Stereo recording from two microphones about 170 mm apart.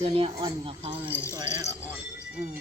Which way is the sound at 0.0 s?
35° right (ahead or behind).